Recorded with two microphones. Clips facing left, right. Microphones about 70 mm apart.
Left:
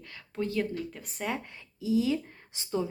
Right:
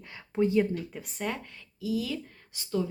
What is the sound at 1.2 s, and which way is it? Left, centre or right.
Speech, centre.